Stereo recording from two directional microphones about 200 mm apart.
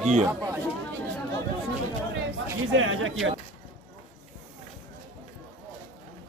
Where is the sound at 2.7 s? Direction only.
85° right.